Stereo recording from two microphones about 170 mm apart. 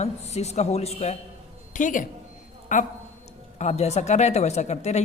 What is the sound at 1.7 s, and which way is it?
A man's voice, 50° left (ahead or behind).